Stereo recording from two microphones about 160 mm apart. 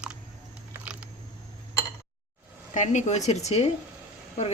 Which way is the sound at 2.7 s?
50° left (ahead or behind).